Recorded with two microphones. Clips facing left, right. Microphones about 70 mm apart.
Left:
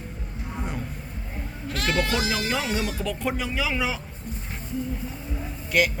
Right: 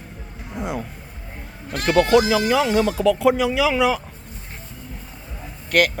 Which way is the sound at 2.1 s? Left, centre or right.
Right.